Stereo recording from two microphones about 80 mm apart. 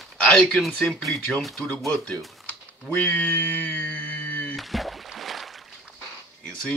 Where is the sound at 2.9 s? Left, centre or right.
Centre.